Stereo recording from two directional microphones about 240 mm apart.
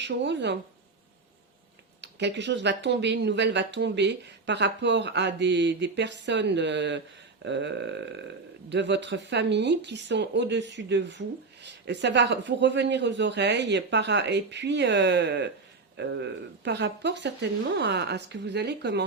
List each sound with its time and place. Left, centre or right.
0.0 s speech: right
2.0 s speech: right